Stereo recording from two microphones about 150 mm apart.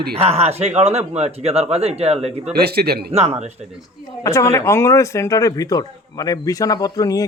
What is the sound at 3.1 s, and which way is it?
Speech, 45° right (ahead or behind).